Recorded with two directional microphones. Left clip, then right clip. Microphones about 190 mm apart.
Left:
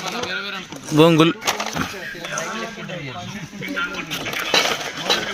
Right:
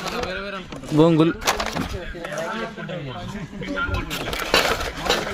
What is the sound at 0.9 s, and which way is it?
Speech, centre (ahead or behind).